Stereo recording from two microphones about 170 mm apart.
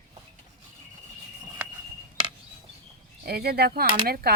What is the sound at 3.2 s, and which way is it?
Speech, 65° right (ahead or behind).